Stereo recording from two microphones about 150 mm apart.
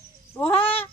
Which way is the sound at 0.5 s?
40° left (ahead or behind).